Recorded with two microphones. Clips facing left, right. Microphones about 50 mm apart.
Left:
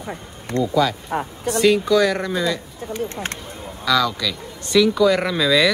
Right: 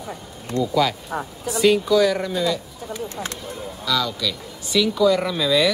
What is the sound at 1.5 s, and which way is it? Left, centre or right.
Speech, centre.